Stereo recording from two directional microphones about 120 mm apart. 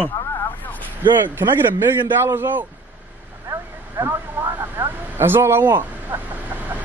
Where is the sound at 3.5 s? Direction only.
20° right (ahead or behind).